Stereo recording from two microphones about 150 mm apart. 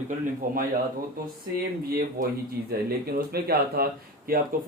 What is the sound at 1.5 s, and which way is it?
Speech, 85° right.